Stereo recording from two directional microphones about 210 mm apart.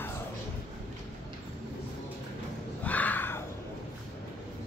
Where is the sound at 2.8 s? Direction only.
5° left (ahead or behind).